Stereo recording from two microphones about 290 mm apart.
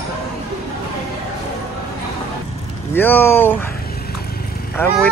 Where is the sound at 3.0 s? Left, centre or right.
Centre.